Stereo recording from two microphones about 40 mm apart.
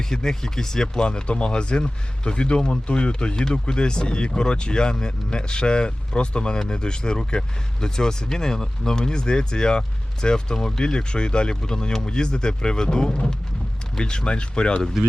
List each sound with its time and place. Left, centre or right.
0.0 s speech: centre
15.0 s speech: centre